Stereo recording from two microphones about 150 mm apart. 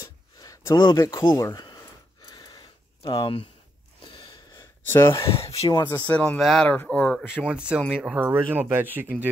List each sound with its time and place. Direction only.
0.0 s a sound: 20° left (ahead or behind)
1.2 s speech: 25° left (ahead or behind)
2.2 s a sound: 25° left (ahead or behind)
4.0 s wheeze: 30° left (ahead or behind)
4.9 s speech: 20° left (ahead or behind)
5.3 s speech: 40° left (ahead or behind)
5.9 s speech: 10° left (ahead or behind)
7.4 s speech: 5° right (ahead or behind)